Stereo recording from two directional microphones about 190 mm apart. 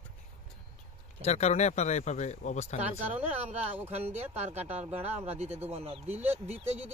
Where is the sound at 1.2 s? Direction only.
35° left (ahead or behind).